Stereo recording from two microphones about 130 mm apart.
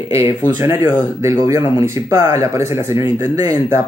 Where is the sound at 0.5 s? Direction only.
20° right (ahead or behind).